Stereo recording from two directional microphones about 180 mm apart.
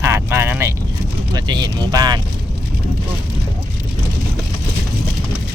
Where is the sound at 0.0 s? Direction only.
15° right (ahead or behind).